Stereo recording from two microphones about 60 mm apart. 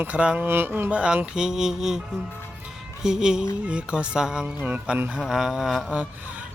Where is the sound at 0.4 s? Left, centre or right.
Right.